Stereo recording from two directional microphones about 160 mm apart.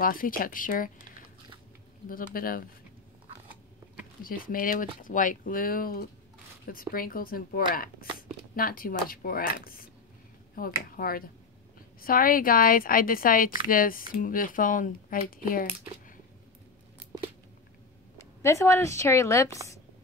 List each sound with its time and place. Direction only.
0.0 s speech: 60° left (ahead or behind)
2.0 s speech: 65° left (ahead or behind)
4.2 s speech: 65° left (ahead or behind)
18.1 s speech: 20° left (ahead or behind)